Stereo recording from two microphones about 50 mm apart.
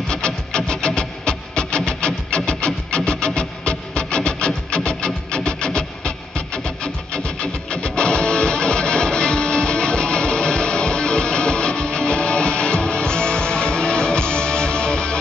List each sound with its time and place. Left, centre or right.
0.1 s music: centre